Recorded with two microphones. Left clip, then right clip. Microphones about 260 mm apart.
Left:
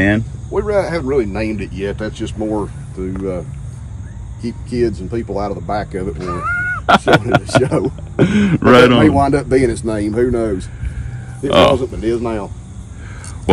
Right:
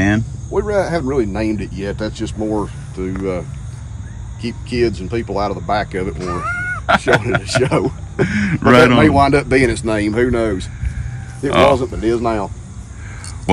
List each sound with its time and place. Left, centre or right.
0.6 s speech: right; by 6.1 s centre
6.1 s speech: centre
7.5 s a man's voice: centre
8.3 s speech: centre
9.1 s speech: centre
11.9 s speech: right